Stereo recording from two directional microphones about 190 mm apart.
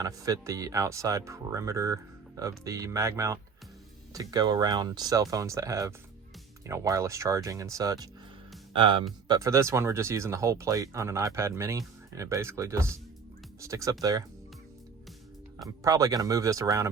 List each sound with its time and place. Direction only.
0.0 s speech: 15° right (ahead or behind)
15.6 s speech: 20° right (ahead or behind)